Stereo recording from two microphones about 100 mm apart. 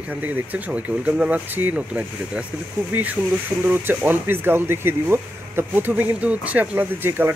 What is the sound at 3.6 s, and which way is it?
Speech, 20° right (ahead or behind).